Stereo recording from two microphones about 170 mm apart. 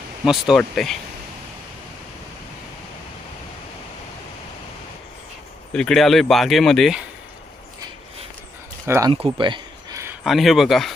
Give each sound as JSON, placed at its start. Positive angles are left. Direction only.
{"t": 0.3, "sound": "speech", "side_deg": 0}
{"t": 5.7, "sound": "speech", "side_deg": 5}
{"t": 8.9, "sound": "speech", "side_deg": -20}
{"t": 9.1, "sound": "a sound", "side_deg": -30}
{"t": 10.2, "sound": "speech", "side_deg": 0}